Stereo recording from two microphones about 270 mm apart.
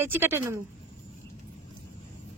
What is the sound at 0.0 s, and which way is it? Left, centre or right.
Speech, centre.